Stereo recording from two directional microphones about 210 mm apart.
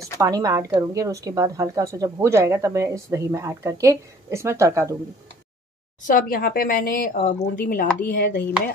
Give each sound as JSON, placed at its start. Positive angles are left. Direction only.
{"t": 0.2, "sound": "speech", "side_deg": -15}
{"t": 6.0, "sound": "speech", "side_deg": 40}